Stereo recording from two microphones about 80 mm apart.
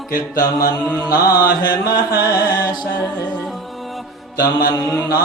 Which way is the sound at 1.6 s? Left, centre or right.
Left.